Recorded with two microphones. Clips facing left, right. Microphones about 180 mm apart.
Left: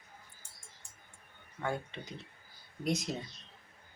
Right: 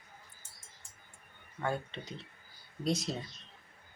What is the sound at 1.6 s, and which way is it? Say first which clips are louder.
Speech: right 1 dB; 15° left (ahead or behind).